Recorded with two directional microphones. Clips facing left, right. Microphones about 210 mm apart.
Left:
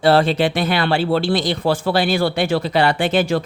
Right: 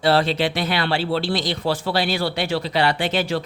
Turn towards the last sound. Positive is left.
turn(degrees=50)  # may be behind; listen again after turning